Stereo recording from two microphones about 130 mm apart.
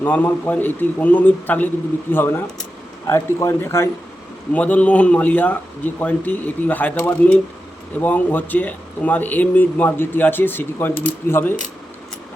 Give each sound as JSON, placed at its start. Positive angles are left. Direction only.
{"t": 0.0, "sound": "a man's voice", "side_deg": 15}